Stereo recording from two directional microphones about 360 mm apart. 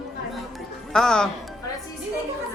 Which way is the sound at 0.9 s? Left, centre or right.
Centre.